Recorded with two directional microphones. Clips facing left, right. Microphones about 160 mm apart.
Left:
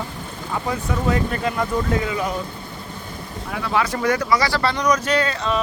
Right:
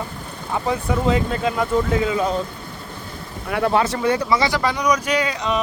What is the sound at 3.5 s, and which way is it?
Speech, 55° right (ahead or behind).